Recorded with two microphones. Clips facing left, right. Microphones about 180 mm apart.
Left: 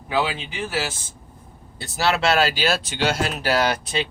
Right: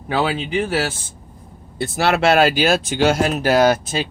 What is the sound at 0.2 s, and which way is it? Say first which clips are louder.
Speech: right 4 dB; 55° right (ahead or behind).